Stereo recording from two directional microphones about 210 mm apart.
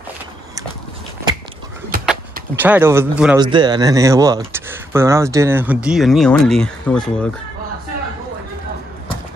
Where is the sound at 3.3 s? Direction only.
20° right (ahead or behind); by 7.3 s 5° left (ahead or behind).